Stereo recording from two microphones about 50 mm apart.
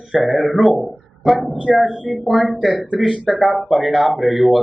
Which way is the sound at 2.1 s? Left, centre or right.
Centre.